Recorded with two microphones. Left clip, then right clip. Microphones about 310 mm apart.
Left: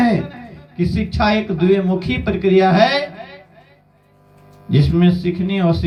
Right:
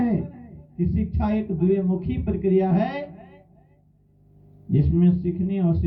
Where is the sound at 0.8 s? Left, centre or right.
Left.